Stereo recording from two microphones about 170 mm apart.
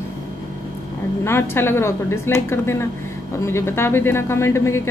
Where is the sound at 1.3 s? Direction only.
15° left (ahead or behind).